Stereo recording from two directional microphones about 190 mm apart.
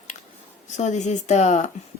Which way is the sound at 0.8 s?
40° left (ahead or behind).